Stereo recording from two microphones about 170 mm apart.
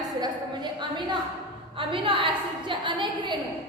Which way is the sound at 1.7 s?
30° right (ahead or behind).